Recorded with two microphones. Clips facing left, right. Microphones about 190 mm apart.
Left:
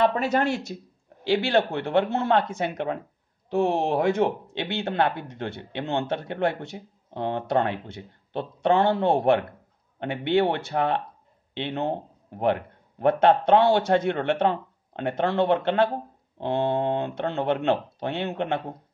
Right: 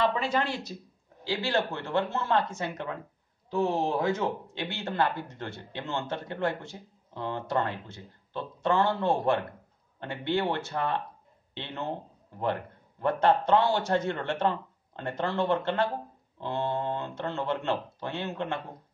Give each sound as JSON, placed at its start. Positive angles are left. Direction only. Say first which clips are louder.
{"t": 0.0, "sound": "speech", "louder": "left 5 dB", "side_deg": 45}
{"t": 1.2, "sound": "a man's voice", "louder": "left 7 dB", "side_deg": 65}